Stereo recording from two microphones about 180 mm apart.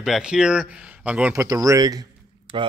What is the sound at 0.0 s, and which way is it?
Speech, 5° right (ahead or behind).